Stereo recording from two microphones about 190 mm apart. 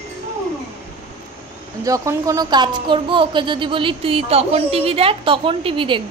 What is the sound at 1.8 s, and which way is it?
Speech, 20° right (ahead or behind).